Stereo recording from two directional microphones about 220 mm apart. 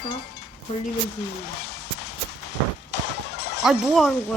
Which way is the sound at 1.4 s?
50° left (ahead or behind).